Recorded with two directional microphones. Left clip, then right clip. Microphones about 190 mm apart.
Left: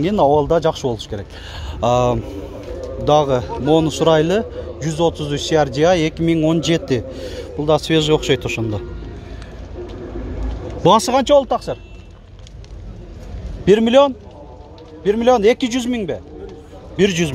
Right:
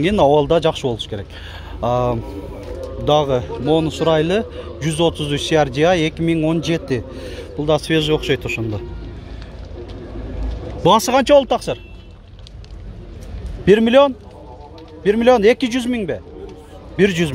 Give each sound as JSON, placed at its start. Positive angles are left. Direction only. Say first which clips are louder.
{"t": 0.0, "sound": "a man's voice", "louder": "right 1 dB", "side_deg": -5}
{"t": 1.8, "sound": "speech", "louder": "left 3 dB", "side_deg": 15}
{"t": 3.1, "sound": "a man's voice", "louder": "left 1 dB", "side_deg": 5}
{"t": 4.6, "sound": "a man's voice", "louder": "even", "side_deg": -10}
{"t": 10.8, "sound": "a man's voice", "louder": "even", "side_deg": 5}
{"t": 11.2, "sound": "speech", "louder": "right 1 dB", "side_deg": -20}
{"t": 13.7, "sound": "a man's voice", "louder": "even", "side_deg": -5}